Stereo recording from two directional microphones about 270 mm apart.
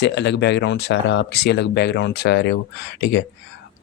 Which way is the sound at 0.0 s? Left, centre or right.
Left.